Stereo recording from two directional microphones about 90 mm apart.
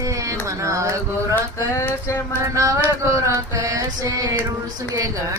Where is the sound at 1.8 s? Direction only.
30° left (ahead or behind).